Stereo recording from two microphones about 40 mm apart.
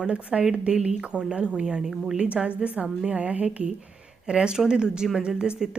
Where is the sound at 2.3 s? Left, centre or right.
Right.